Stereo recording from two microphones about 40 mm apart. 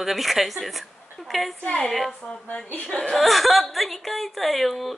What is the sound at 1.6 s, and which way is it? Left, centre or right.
Speech, centre.